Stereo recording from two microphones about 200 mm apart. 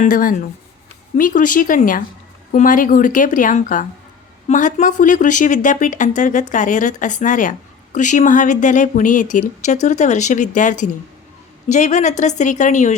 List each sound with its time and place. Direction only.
0.0 s speech: 45° left (ahead or behind)